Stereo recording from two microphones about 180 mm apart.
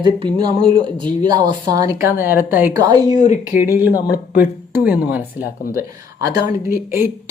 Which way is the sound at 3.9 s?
20° left (ahead or behind).